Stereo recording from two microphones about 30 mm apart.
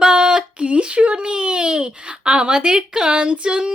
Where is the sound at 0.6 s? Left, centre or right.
Right.